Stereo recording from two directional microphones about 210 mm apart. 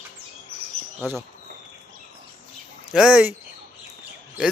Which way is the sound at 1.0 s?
Centre (ahead or behind).